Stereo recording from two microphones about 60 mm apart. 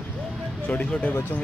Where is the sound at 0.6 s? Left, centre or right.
Left.